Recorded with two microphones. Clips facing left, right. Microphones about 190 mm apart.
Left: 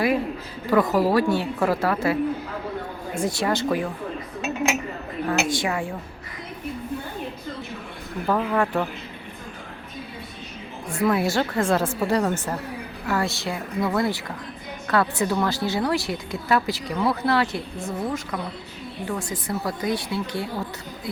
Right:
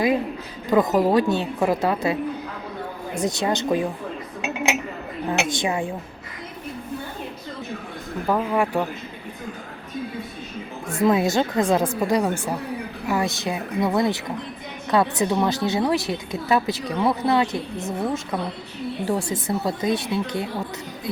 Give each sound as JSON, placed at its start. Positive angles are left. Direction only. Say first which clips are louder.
{"t": 0.7, "sound": "speech", "louder": "right 1 dB", "side_deg": -20}
{"t": 3.2, "sound": "speech", "louder": "right 1 dB", "side_deg": -20}
{"t": 5.2, "sound": "speech", "louder": "even", "side_deg": -20}
{"t": 8.3, "sound": "speech", "louder": "right 1 dB", "side_deg": -10}
{"t": 11.0, "sound": "speech", "louder": "right 3 dB", "side_deg": -20}